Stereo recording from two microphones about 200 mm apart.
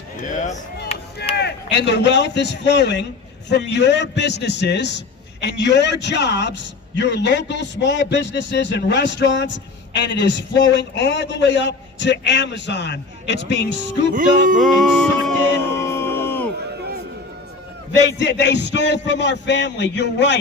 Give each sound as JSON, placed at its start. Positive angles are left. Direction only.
{"t": 0.2, "sound": "speech", "side_deg": 40}
{"t": 1.4, "sound": "a man's voice", "side_deg": 60}
{"t": 14.1, "sound": "music", "side_deg": -40}
{"t": 14.6, "sound": "music", "side_deg": 0}
{"t": 15.8, "sound": "a sound", "side_deg": 15}
{"t": 17.9, "sound": "a man's voice", "side_deg": 60}